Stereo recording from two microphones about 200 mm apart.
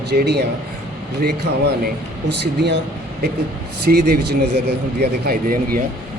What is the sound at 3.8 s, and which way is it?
Speech, 55° right (ahead or behind).